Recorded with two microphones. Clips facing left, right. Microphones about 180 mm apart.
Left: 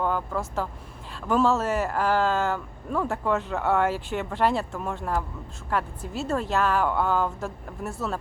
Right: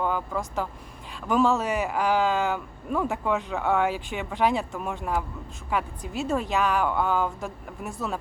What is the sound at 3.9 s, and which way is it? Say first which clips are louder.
Speech: left 2 dB; 15° right (ahead or behind).